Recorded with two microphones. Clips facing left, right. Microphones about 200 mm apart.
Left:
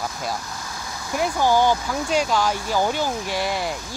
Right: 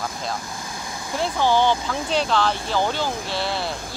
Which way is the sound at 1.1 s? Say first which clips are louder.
Left 1 dB; 10° left (ahead or behind).